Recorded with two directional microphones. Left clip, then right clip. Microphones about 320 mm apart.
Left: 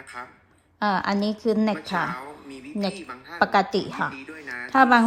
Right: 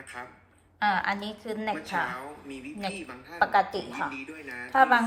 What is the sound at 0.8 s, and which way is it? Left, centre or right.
Speech, centre.